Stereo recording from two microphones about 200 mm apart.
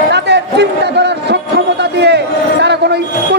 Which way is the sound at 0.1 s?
60° right (ahead or behind).